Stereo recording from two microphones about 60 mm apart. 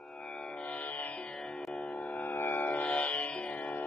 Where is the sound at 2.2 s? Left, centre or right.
Left.